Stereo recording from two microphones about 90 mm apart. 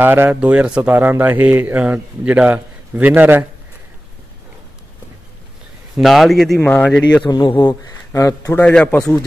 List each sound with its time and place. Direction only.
0.0 s a man's voice: 25° right (ahead or behind)
5.9 s speech: centre (ahead or behind)
7.2 s a man's voice: 55° left (ahead or behind)
8.1 s speech: 35° left (ahead or behind)
8.6 s speech: 10° left (ahead or behind)